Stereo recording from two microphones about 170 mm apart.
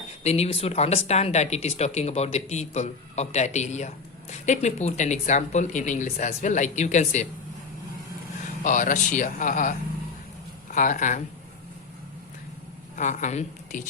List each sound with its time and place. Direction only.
0.2 s speech: 40° left (ahead or behind)
8.6 s speech: 50° left (ahead or behind)
13.0 s speech: 45° left (ahead or behind)